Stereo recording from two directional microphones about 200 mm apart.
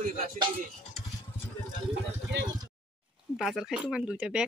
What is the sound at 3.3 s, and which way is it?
Speech, centre (ahead or behind).